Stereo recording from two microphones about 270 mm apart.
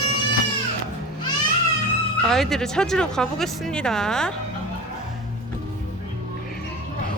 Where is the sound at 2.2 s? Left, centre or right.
Centre.